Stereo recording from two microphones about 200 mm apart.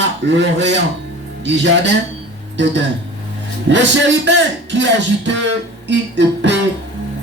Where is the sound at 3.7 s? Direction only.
65° right (ahead or behind).